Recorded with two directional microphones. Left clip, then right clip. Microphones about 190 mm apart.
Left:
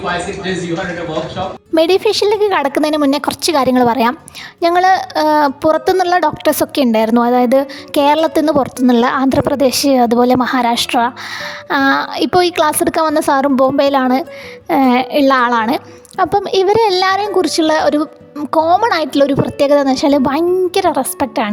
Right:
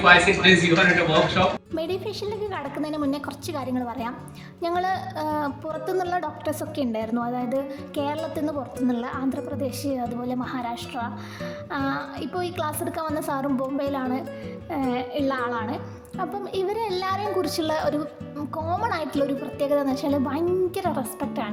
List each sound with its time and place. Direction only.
1.7 s a child's voice: 55° left (ahead or behind)